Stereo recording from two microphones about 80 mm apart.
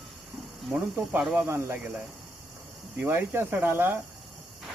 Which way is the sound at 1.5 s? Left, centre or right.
Right.